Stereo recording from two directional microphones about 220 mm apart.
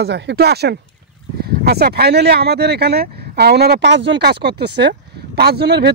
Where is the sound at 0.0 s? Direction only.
50° right (ahead or behind).